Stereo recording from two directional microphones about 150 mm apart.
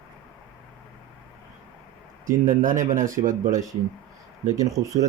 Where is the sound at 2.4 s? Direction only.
65° right (ahead or behind).